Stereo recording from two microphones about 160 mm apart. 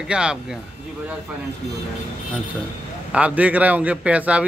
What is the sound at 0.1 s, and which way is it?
Speech, 5° right (ahead or behind).